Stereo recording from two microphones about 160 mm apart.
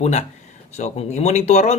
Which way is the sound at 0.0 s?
45° left (ahead or behind).